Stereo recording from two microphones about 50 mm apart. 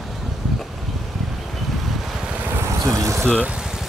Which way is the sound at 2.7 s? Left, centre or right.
Right.